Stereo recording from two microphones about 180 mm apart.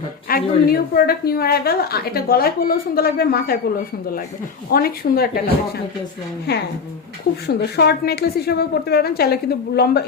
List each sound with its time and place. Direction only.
0.3 s a woman's voice: 55° left (ahead or behind)
4.7 s a woman's voice: 55° left (ahead or behind)
7.4 s a woman's voice: 65° left (ahead or behind)